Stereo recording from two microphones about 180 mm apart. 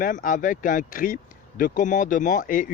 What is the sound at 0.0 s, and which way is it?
Speech, 50° left (ahead or behind).